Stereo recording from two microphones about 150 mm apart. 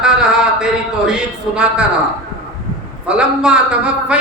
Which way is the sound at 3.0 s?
5° right (ahead or behind).